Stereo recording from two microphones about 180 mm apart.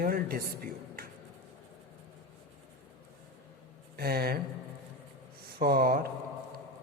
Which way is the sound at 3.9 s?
60° right (ahead or behind).